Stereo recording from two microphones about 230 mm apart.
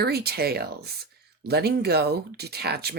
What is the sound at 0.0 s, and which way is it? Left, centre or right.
Speech, right.